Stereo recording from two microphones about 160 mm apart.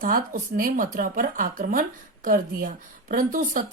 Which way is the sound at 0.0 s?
60° right (ahead or behind).